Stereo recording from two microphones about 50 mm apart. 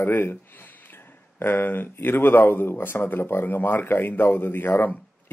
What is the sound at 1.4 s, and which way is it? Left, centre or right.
Speech, left.